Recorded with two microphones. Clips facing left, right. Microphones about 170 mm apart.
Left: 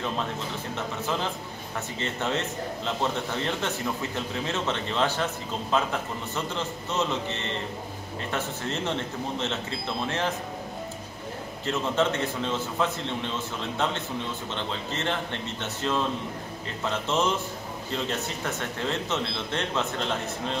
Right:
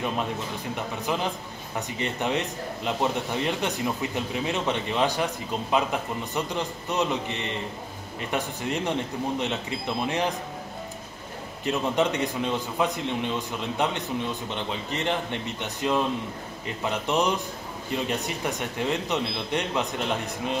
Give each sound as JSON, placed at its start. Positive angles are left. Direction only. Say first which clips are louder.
{"t": 0.7, "sound": "a man's voice", "louder": "right 1 dB", "side_deg": -15}
{"t": 11.6, "sound": "a man's voice", "louder": "right 1 dB", "side_deg": -15}